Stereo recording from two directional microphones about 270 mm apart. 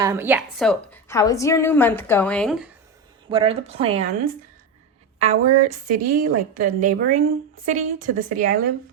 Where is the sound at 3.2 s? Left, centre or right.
Centre.